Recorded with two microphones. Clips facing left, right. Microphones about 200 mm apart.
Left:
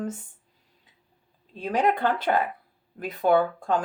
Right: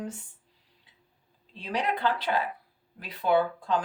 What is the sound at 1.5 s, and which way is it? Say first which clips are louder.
Speech: left 6 dB; 45° left (ahead or behind).